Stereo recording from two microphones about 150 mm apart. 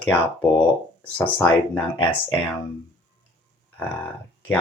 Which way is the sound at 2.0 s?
30° left (ahead or behind).